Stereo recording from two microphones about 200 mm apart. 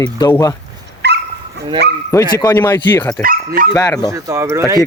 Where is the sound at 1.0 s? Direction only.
60° right (ahead or behind).